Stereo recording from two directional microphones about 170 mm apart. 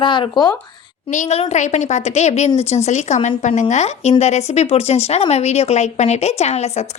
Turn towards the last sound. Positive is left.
turn(degrees=40)  # may be behind; listen again after turning